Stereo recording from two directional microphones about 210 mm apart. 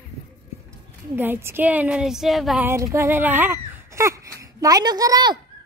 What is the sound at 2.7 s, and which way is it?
Speech, 15° right (ahead or behind).